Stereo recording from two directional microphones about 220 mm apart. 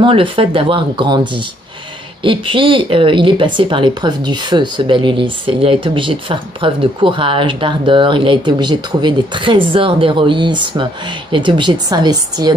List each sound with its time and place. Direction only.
0.0 s speech: 25° right (ahead or behind)